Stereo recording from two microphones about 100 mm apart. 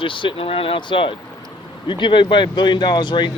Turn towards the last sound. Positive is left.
turn(degrees=50)  # may be behind; listen again after turning